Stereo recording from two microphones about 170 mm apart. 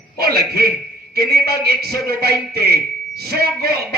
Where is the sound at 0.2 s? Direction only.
65° right (ahead or behind).